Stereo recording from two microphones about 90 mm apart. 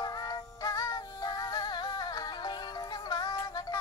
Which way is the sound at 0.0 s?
50° left (ahead or behind).